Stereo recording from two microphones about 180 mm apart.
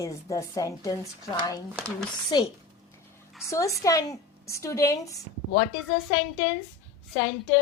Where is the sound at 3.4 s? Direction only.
15° left (ahead or behind).